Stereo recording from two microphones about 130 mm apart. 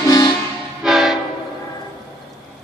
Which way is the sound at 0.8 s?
5° right (ahead or behind).